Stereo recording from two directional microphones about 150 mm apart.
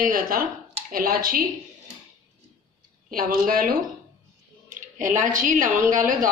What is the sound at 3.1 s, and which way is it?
Speech, 70° right (ahead or behind).